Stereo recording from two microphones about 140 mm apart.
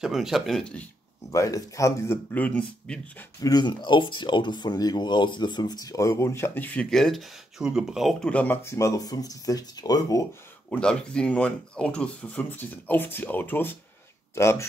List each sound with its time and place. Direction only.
0.0 s speech: centre (ahead or behind)
1.3 s speech: 25° left (ahead or behind)
2.3 s speech: 10° left (ahead or behind)
3.3 s speech: 30° left (ahead or behind)
10.7 s speech: 5° left (ahead or behind)